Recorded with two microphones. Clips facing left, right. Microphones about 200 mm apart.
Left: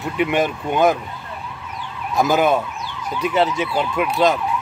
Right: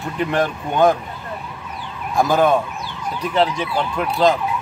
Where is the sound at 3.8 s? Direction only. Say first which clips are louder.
Even; 10° left (ahead or behind).